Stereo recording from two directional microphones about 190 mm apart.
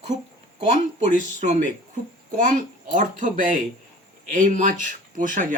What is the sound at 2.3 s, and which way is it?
A man's voice, 40° right (ahead or behind).